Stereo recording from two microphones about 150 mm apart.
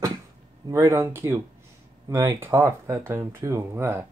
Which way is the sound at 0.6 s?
20° right (ahead or behind).